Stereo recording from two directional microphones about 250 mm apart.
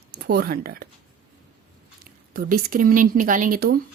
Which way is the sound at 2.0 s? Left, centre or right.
Right.